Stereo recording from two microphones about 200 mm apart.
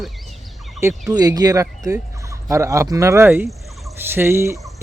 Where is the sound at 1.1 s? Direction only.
20° right (ahead or behind).